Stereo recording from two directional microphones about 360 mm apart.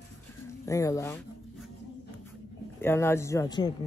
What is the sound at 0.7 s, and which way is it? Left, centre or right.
Speech, centre.